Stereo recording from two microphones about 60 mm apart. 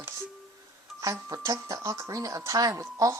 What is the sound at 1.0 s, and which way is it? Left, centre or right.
Speech, right.